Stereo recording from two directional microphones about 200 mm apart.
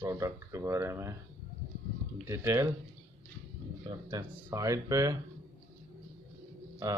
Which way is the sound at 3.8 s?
15° right (ahead or behind).